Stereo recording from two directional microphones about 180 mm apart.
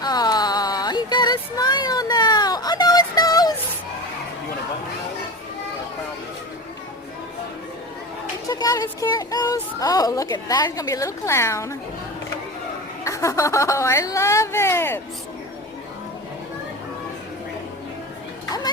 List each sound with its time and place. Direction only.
0.0 s a sound: 20° left (ahead or behind)
8.4 s speech: 20° left (ahead or behind)
13.1 s speech: 15° left (ahead or behind)